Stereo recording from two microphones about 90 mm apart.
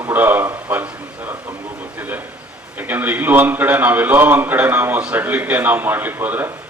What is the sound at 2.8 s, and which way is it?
A man's voice, 20° right (ahead or behind).